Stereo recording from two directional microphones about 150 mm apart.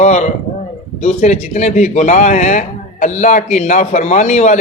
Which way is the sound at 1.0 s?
50° left (ahead or behind).